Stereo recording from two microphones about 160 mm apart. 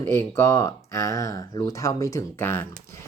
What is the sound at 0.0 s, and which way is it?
Speech, 15° left (ahead or behind).